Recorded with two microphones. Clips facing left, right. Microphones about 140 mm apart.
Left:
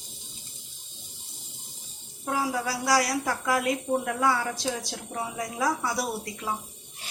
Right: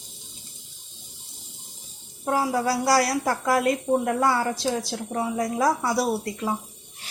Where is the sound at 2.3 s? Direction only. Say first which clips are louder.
Right 5 dB; 40° right (ahead or behind).